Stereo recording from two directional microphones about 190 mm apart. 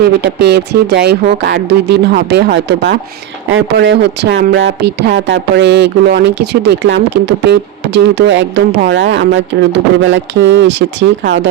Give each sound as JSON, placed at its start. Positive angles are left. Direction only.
{"t": 0.2, "sound": "speech", "side_deg": -60}